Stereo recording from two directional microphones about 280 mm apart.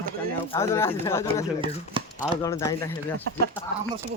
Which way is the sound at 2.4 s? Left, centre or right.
Centre.